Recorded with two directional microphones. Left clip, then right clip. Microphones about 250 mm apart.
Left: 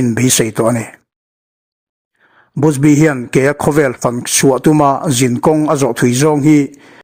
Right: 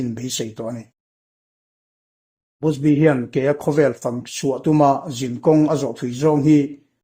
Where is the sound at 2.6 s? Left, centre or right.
Left.